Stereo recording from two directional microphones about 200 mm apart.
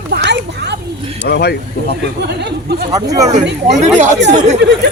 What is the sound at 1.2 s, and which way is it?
Speech, 55° left (ahead or behind).